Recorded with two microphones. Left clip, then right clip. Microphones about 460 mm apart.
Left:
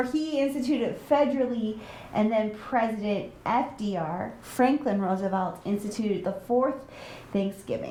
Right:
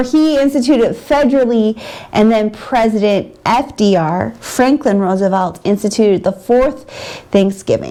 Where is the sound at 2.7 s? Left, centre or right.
Right.